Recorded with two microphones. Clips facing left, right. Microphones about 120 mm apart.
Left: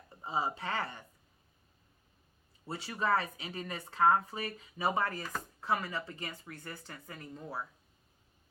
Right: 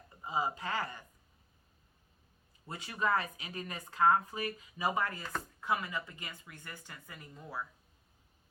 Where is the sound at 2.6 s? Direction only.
30° left (ahead or behind).